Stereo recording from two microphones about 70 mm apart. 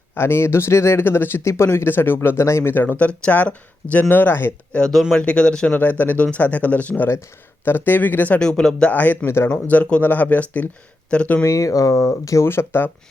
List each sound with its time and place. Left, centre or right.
0.1 s speech: left
3.0 s speech: left
4.1 s speech: left
4.7 s speech: centre
5.7 s speech: left
8.4 s speech: centre
8.9 s speech: left
9.2 s speech: left
9.6 s speech: centre
11.4 s speech: left
12.5 s speech: left